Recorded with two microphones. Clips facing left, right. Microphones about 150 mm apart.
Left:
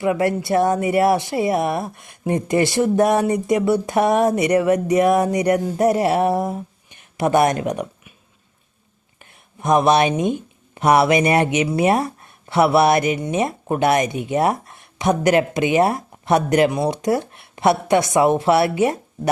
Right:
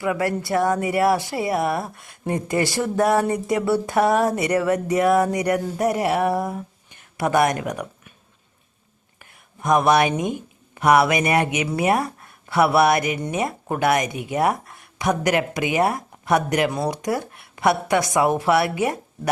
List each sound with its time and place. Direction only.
0.0 s speech: 25° left (ahead or behind)
9.1 s a sound: 25° left (ahead or behind)
10.8 s speech: 25° left (ahead or behind)